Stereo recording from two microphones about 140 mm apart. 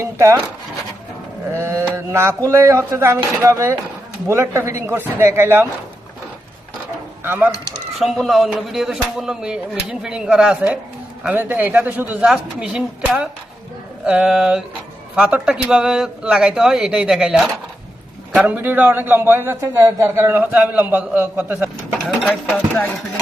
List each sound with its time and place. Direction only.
0.0 s speech: 20° right (ahead or behind)
1.5 s a man's voice: 20° right (ahead or behind)
7.3 s a man's voice: 10° right (ahead or behind)
8.0 s a man's voice: centre (ahead or behind)
22.5 s speech: 10° left (ahead or behind)